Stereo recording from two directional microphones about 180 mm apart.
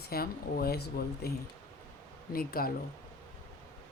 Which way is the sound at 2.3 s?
55° left (ahead or behind).